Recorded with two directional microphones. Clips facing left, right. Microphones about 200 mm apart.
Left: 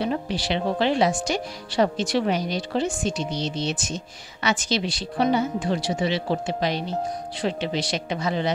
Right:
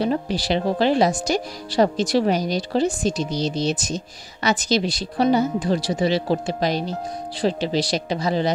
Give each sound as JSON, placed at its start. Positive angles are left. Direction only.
{"t": 0.0, "sound": "speech", "side_deg": -40}